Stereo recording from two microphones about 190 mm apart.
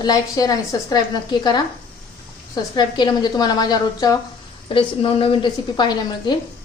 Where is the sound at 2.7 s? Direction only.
25° left (ahead or behind).